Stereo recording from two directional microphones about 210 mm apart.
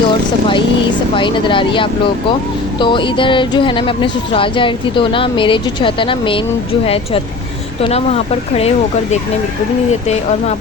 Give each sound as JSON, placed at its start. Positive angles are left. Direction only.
{"t": 1.1, "sound": "speech", "side_deg": 25}